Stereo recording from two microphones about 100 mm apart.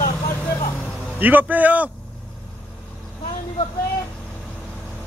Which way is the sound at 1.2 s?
20° right (ahead or behind).